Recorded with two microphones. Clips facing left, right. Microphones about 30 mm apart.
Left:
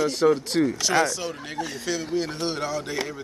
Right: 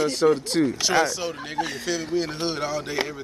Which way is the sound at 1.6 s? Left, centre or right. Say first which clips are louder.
Right 5 dB; right.